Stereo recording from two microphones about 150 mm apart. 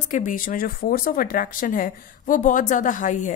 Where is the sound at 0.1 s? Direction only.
65° left (ahead or behind).